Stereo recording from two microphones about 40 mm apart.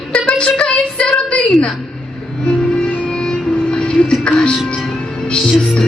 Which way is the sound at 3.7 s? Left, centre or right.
Left.